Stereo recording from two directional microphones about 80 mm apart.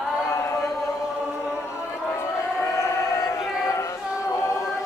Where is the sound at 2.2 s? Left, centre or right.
Left.